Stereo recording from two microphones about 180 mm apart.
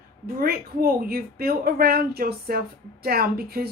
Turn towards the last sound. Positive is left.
turn(degrees=-55)  # may be behind; listen again after turning